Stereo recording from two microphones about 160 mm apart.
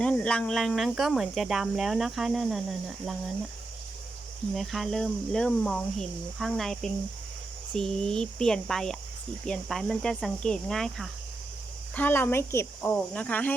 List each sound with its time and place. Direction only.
0.0 s speech: 10° left (ahead or behind)
4.5 s speech: centre (ahead or behind)
11.9 s speech: 15° left (ahead or behind)